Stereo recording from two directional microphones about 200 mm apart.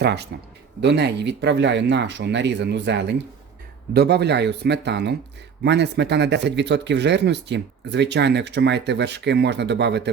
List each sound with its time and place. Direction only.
0.0 s speech: 55° right (ahead or behind)